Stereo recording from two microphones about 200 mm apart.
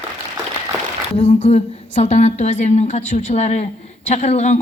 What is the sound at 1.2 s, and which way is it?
A woman's voice, 35° left (ahead or behind).